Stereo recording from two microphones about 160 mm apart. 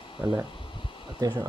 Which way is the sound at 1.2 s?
25° right (ahead or behind).